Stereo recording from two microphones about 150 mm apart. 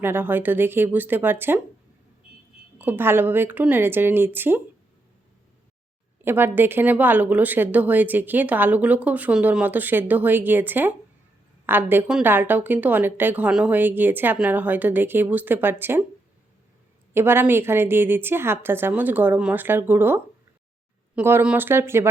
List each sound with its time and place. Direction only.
0.0 s speech: 15° right (ahead or behind)
2.7 s speech: 15° right (ahead or behind)
6.2 s speech: 15° right (ahead or behind)
17.2 s speech: 15° right (ahead or behind)